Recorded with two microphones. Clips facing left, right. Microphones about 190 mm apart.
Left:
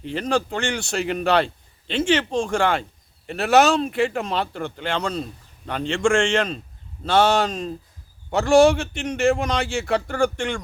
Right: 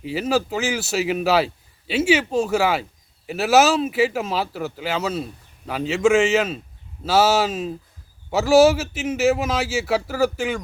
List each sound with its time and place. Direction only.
0.0 s speech: 5° right (ahead or behind)